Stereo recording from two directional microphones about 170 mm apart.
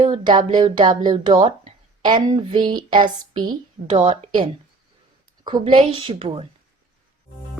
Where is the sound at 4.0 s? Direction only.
25° right (ahead or behind).